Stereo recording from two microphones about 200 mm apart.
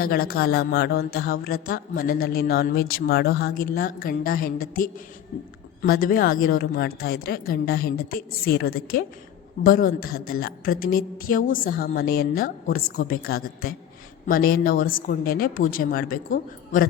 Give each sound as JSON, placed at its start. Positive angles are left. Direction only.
{"t": 0.0, "sound": "a woman's voice", "side_deg": 50}